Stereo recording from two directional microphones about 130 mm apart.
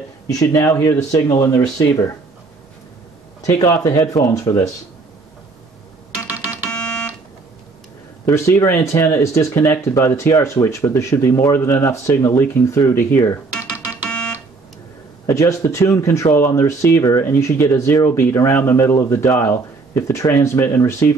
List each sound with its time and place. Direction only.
0.3 s speech: 25° left (ahead or behind)
3.4 s speech: 25° left (ahead or behind)
6.2 s ringtone: 25° left (ahead or behind)
6.7 s fire alarm: 5° left (ahead or behind)
8.3 s speech: 20° left (ahead or behind)
15.2 s speech: 25° left (ahead or behind)